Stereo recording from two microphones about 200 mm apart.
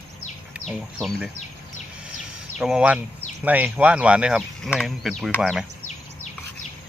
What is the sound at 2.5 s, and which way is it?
Speech, 5° right (ahead or behind).